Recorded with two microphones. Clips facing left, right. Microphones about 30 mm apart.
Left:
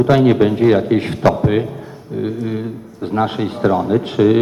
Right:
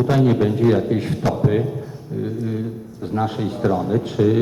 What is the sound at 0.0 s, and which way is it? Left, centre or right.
Speech, left.